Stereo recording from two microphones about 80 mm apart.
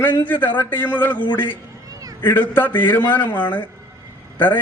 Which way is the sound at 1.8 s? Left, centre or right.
Right.